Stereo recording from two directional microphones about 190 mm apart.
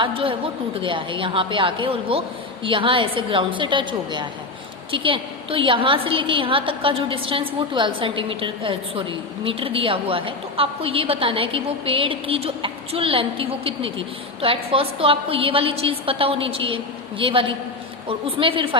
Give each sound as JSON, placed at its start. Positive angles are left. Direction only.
{"t": 0.0, "sound": "a woman's voice", "side_deg": -30}